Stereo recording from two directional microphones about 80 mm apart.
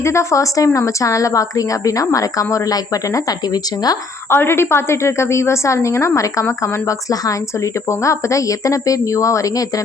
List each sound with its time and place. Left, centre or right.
0.0 s a woman's voice: left
4.3 s a woman's voice: left